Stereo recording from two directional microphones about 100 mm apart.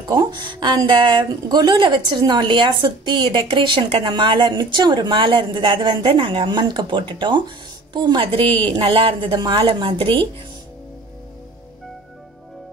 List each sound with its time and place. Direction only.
0.1 s a woman's voice: 50° right (ahead or behind)